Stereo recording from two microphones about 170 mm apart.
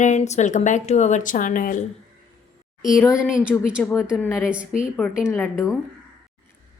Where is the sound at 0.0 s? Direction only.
45° left (ahead or behind).